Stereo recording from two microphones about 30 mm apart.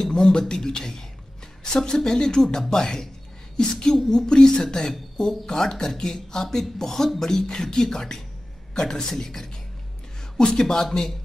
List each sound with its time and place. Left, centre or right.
0.0 s speech: left
4.1 s speech: centre